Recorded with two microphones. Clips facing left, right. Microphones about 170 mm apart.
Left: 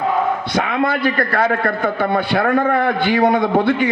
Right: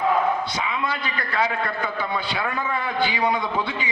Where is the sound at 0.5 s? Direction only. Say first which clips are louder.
Left 9 dB; 65° left (ahead or behind).